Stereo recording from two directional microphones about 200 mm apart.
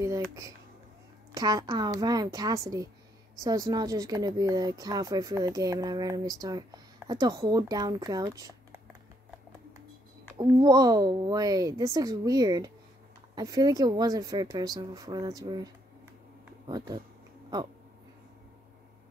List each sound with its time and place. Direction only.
0.0 s a sound: 15° right (ahead or behind)
1.3 s a woman's voice: 20° right (ahead or behind)
10.3 s a woman's voice: 20° right (ahead or behind)